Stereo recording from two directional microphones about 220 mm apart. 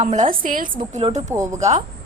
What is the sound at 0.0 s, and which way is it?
A woman's voice, 30° right (ahead or behind).